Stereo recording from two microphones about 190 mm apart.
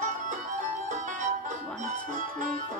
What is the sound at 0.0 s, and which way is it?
Music, 40° right (ahead or behind).